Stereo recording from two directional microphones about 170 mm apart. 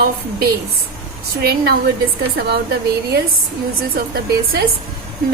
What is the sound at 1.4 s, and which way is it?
Speech, 70° right (ahead or behind).